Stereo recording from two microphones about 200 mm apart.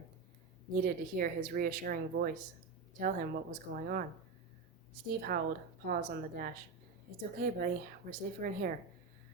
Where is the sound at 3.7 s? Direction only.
50° right (ahead or behind).